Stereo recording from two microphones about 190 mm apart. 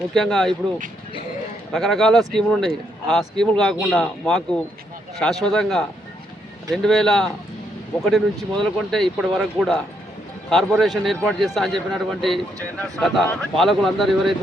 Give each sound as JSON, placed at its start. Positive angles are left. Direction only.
{"t": 0.1, "sound": "a man's voice", "side_deg": 5}
{"t": 1.7, "sound": "a man's voice", "side_deg": 0}